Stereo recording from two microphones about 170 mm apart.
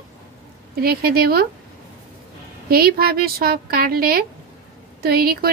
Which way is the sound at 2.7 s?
65° right (ahead or behind).